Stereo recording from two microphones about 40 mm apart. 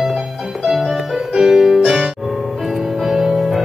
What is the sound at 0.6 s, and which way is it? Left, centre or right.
Music, centre.